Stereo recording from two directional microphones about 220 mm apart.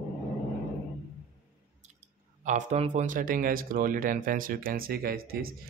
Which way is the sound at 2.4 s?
30° right (ahead or behind).